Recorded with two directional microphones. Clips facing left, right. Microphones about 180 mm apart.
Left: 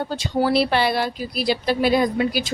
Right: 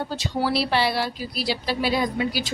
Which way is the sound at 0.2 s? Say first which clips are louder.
Left 6 dB; 55° left (ahead or behind).